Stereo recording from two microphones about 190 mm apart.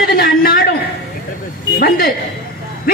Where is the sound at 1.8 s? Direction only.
50° left (ahead or behind).